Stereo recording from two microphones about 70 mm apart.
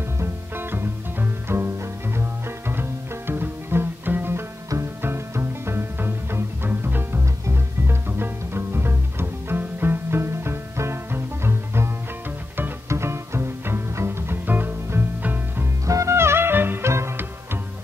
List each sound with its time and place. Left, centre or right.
0.2 s music: right
2.7 s music: right
15.9 s music: right